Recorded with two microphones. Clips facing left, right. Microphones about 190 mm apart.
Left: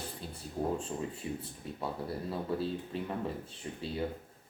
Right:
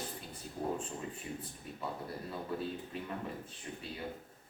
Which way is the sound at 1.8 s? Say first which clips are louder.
Left 4 dB; 30° left (ahead or behind).